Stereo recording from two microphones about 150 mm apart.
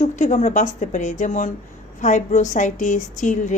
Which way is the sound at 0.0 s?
50° left (ahead or behind).